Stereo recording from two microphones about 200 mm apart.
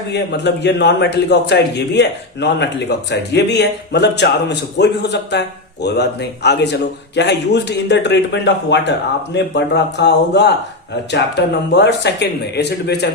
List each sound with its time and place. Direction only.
0.1 s a man's voice: 60° left (ahead or behind)